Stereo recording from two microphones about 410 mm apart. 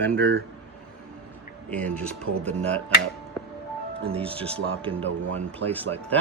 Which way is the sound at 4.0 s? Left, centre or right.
Centre.